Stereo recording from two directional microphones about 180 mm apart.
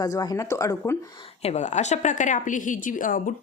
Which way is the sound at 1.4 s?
40° left (ahead or behind).